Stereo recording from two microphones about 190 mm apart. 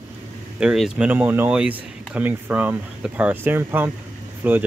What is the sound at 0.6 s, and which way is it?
Speech, 5° right (ahead or behind).